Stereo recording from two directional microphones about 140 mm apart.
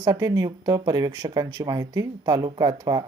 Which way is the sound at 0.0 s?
25° right (ahead or behind).